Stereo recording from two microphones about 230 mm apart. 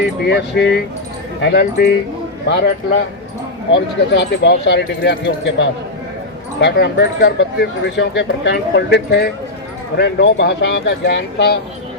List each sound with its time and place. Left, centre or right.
0.0 s speech: left
4.1 s speech: left